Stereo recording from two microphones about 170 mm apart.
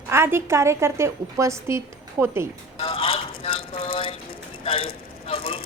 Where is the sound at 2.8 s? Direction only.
35° left (ahead or behind).